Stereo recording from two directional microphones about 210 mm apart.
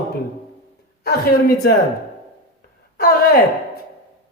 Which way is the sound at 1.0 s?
50° left (ahead or behind).